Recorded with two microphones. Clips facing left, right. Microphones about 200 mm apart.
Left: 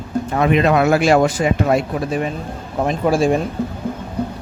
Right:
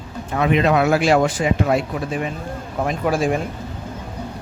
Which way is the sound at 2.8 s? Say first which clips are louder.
Left 4 dB; 30° left (ahead or behind).